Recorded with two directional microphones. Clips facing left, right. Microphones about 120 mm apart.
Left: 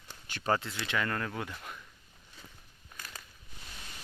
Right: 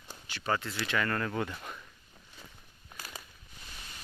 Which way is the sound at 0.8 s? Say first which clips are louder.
Right 2 dB; 15° left (ahead or behind).